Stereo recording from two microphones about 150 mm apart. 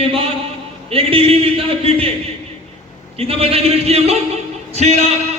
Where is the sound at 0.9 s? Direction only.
40° right (ahead or behind).